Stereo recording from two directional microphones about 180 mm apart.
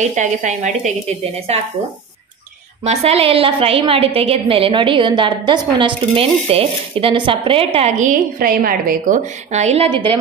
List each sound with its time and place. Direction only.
0.0 s a woman's voice: 40° right (ahead or behind)
2.8 s a woman's voice: 35° right (ahead or behind)